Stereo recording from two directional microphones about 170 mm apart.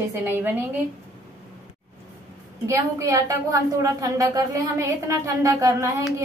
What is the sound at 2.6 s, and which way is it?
A woman's voice, 20° right (ahead or behind).